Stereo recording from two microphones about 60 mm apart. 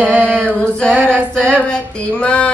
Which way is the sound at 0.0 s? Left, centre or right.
Right.